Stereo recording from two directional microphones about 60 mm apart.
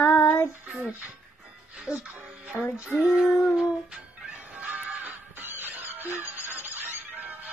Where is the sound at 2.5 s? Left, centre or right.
Left.